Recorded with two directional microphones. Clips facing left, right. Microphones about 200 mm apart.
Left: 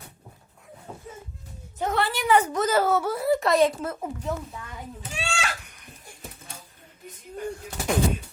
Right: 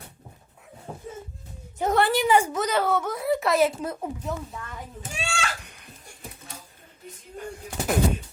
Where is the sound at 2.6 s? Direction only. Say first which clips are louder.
Left 2 dB; 5° left (ahead or behind).